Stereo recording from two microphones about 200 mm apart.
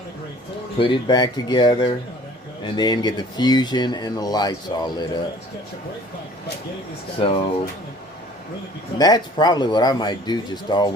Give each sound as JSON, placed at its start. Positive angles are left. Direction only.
{"t": 0.8, "sound": "speech", "side_deg": 25}
{"t": 7.2, "sound": "speech", "side_deg": 30}
{"t": 9.0, "sound": "speech", "side_deg": 20}